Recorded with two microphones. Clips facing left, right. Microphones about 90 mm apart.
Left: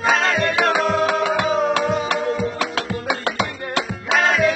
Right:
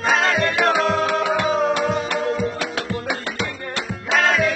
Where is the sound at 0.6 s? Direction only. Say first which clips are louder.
Left 1 dB; centre (ahead or behind).